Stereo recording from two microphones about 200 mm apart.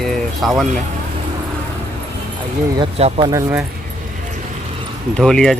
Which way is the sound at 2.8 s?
30° right (ahead or behind).